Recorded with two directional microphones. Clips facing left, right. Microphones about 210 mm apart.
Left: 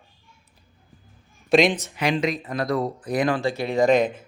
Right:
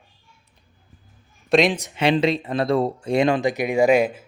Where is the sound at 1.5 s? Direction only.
Centre (ahead or behind).